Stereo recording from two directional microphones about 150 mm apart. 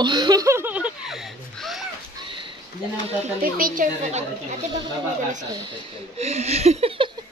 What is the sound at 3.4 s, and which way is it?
Speech, 70° right (ahead or behind).